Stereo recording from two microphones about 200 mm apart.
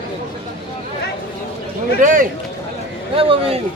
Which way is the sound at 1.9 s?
40° right (ahead or behind).